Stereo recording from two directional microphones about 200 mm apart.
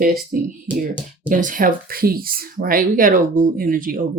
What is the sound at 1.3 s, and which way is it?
Speech, 40° right (ahead or behind).